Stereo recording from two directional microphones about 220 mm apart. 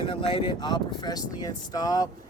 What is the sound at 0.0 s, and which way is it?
Speech, 25° left (ahead or behind).